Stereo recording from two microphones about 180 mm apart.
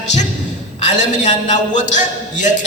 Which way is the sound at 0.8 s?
40° left (ahead or behind).